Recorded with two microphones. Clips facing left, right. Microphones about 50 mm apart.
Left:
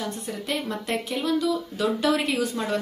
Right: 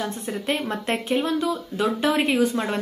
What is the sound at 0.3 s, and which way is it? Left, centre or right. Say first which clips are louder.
Speech: right 4 dB; right.